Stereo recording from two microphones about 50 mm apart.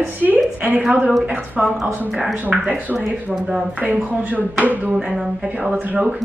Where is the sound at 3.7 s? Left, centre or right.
Right.